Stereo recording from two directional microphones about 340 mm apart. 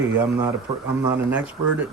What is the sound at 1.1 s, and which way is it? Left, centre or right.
Speech, centre.